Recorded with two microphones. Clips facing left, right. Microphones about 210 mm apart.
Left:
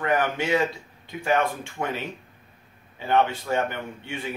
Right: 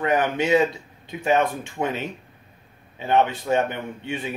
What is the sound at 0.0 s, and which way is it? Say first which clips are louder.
A man's voice: right 3 dB; 20° right (ahead or behind).